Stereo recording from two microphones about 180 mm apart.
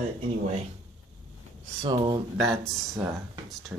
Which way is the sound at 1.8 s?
30° right (ahead or behind).